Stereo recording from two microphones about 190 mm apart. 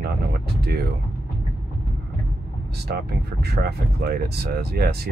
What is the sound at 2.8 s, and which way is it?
Speech, 60° right (ahead or behind).